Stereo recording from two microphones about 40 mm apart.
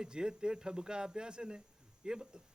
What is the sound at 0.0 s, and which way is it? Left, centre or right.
Speech, centre.